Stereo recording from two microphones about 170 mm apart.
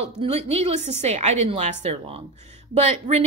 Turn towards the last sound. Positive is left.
turn(degrees=-40)  # may be behind; listen again after turning